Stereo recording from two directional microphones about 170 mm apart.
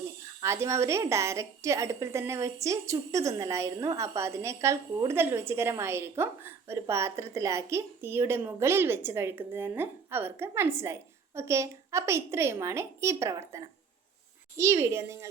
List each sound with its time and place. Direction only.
0.3 s a woman's voice: 15° right (ahead or behind)
14.6 s a woman's voice: 15° right (ahead or behind)